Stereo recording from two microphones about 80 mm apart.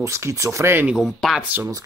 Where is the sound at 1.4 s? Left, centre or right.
Right.